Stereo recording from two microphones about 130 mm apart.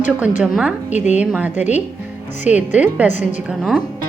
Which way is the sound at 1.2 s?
10° right (ahead or behind).